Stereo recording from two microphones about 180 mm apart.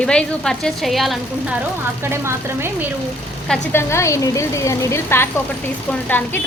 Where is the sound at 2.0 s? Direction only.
15° right (ahead or behind).